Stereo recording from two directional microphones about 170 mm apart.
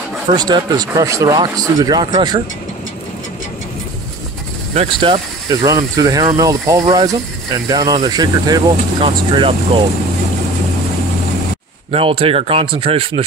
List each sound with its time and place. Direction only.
0.3 s speech: 25° right (ahead or behind)
4.7 s speech: 30° right (ahead or behind)
11.9 s speech: 35° right (ahead or behind)